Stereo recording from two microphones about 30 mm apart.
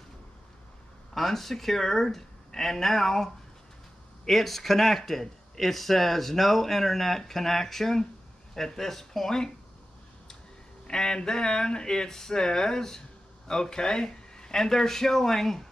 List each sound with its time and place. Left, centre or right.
1.1 s speech: centre
4.3 s speech: centre
10.9 s speech: left